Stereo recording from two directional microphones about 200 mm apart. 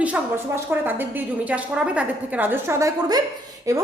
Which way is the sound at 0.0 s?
10° right (ahead or behind).